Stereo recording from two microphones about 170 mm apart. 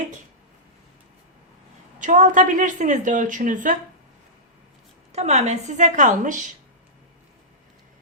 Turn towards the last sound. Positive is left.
turn(degrees=-50)  # may be behind; listen again after turning